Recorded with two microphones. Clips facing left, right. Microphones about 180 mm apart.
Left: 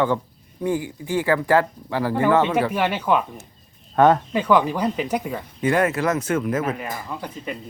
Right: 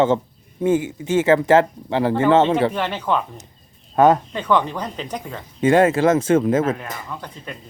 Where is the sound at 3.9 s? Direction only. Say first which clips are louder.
Right 1 dB; 15° right (ahead or behind).